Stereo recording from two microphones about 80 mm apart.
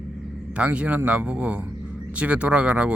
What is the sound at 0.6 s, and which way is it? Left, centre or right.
A man's voice, centre.